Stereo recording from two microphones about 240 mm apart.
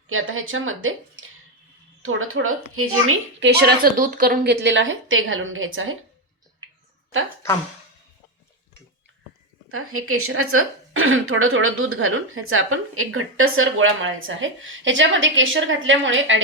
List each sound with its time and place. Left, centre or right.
0.1 s a woman's voice: right
3.6 s a woman's voice: right
9.6 s a woman's voice: right